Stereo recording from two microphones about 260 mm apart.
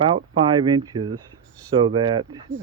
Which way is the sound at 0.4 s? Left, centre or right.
Centre.